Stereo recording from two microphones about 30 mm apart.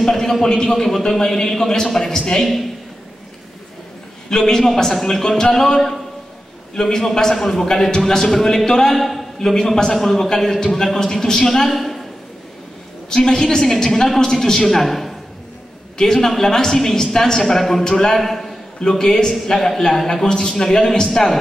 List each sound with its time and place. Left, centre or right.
0.2 s speech: centre
0.7 s a man's voice: centre
1.0 s a woman's voice: centre
2.4 s a man's voice: centre
4.3 s a woman's voice: centre
8.3 s a woman's voice: centre
8.9 s a man's voice: centre
11.7 s a woman's voice: centre
13.1 s a man's voice: left; by 15.1 s centre
16.0 s a woman's voice: centre
18.8 s a man's voice: centre
20.1 s a man's voice: left